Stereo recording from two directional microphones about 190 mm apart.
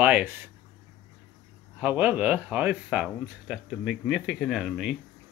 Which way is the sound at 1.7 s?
10° right (ahead or behind).